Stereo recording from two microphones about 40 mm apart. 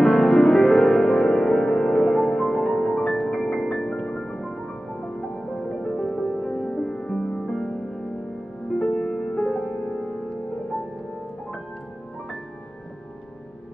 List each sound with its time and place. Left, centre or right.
0.0 s music: centre
8.7 s music: centre